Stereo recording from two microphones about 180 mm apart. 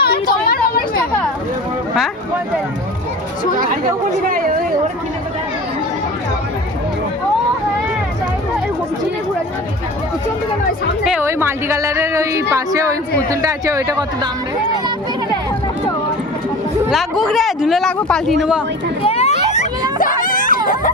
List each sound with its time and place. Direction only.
0.0 s a sound: 55° left (ahead or behind)
11.0 s speech: 5° right (ahead or behind)
11.3 s speech: 15° right (ahead or behind)
16.9 s speech: centre (ahead or behind)
19.0 s children playing: 35° left (ahead or behind)
20.0 s a sound: 50° left (ahead or behind)